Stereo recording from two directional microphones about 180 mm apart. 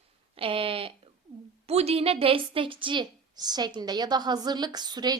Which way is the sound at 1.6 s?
35° right (ahead or behind).